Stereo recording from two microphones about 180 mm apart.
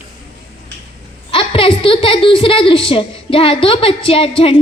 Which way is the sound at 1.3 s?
30° left (ahead or behind).